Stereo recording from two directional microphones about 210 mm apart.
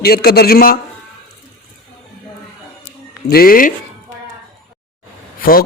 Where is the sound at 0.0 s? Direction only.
50° left (ahead or behind).